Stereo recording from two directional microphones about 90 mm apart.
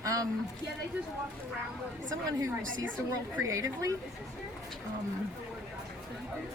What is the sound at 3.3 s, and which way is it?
Speech, 35° right (ahead or behind).